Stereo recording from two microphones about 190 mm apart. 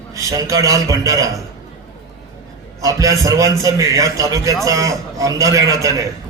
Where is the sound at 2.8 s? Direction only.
15° right (ahead or behind).